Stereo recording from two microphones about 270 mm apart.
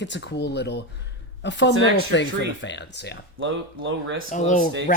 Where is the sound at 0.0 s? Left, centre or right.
Left.